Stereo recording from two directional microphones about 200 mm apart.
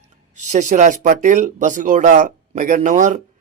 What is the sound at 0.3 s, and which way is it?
Speech, 35° right (ahead or behind).